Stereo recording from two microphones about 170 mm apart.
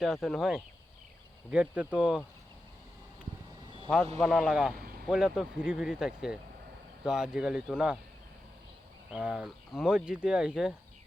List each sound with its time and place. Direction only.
0.0 s speech: centre (ahead or behind)
3.8 s speech: 10° left (ahead or behind)
4.8 s vehicle: 60° right (ahead or behind)
5.1 s speech: 5° right (ahead or behind)
9.0 s speech: 5° right (ahead or behind)